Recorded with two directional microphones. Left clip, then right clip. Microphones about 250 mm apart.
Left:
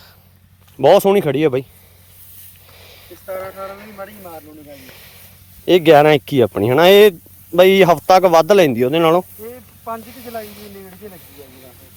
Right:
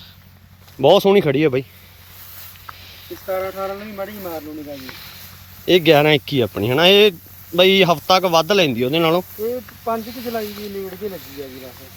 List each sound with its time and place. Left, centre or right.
0.8 s speech: centre
3.2 s speech: right
5.6 s speech: centre
9.4 s speech: right